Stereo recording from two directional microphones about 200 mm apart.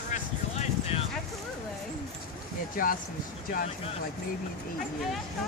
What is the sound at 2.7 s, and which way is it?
Speech, 45° left (ahead or behind).